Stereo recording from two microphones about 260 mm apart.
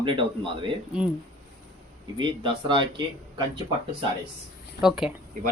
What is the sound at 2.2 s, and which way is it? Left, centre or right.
Speech, centre.